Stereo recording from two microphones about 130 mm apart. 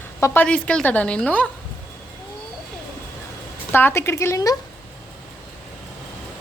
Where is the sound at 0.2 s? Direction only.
10° left (ahead or behind).